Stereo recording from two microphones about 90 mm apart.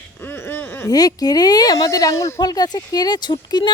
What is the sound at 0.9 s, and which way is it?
Speech, 45° left (ahead or behind).